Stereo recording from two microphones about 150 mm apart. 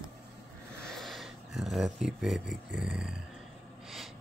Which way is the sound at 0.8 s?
Centre (ahead or behind).